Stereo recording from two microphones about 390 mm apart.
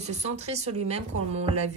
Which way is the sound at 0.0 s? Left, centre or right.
Centre.